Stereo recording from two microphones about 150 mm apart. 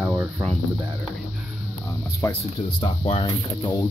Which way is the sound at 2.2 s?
20° left (ahead or behind).